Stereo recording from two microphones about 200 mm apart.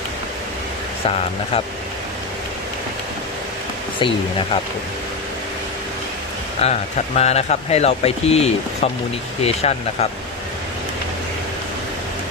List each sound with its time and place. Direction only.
1.0 s speech: 30° left (ahead or behind)
6.6 s speech: 30° left (ahead or behind)